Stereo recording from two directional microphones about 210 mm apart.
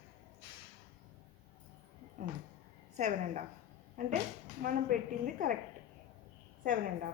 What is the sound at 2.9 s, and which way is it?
A woman's voice, 35° right (ahead or behind).